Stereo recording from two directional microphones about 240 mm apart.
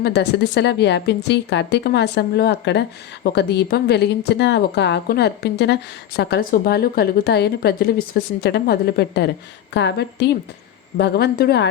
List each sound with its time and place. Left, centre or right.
0.0 s a woman's voice: left